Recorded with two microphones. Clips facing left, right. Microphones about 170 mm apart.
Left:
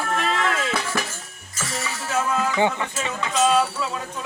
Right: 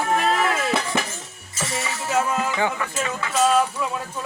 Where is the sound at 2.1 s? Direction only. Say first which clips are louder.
Right 1 dB; 15° right (ahead or behind).